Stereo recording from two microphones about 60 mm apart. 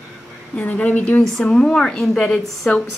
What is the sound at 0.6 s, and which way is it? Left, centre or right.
Speech, left.